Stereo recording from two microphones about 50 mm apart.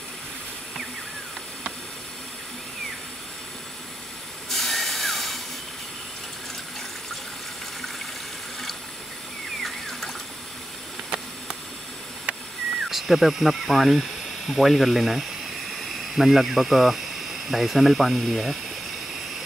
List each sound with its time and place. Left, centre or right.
4.5 s a sound: centre
9.6 s water: centre
12.9 s speech: centre